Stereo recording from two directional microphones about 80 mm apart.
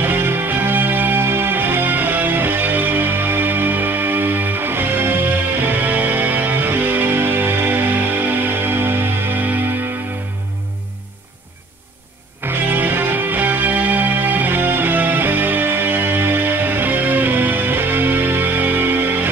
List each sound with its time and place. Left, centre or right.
0.0 s music: right
12.4 s music: right